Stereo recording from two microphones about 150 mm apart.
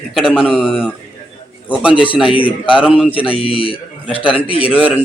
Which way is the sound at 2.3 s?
35° left (ahead or behind).